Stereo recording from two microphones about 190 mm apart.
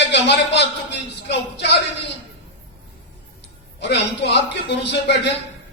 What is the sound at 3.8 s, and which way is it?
A man's voice, 65° left (ahead or behind).